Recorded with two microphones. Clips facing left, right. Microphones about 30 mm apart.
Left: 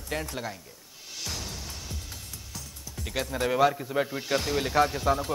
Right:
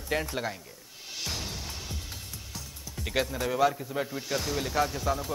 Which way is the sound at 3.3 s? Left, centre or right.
Centre.